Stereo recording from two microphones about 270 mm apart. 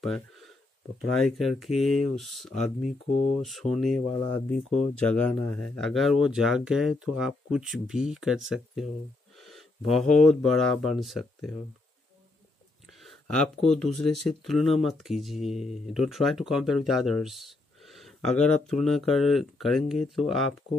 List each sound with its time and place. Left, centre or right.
0.0 s a sound: centre
1.1 s speech: centre
3.1 s speech: left
3.4 s speech: centre
13.0 s speech: centre